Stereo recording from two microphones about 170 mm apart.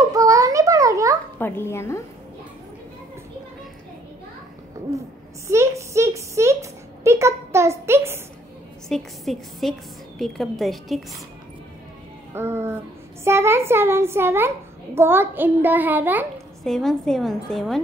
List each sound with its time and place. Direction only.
0.1 s a sound: 20° right (ahead or behind)
1.4 s a woman's voice: 15° left (ahead or behind)
4.9 s a child's voice: 15° right (ahead or behind)
5.5 s a sound: 15° right (ahead or behind)
8.8 s a woman's voice: centre (ahead or behind)
12.4 s a child's voice: 15° right (ahead or behind)
16.6 s a woman's voice: 5° left (ahead or behind)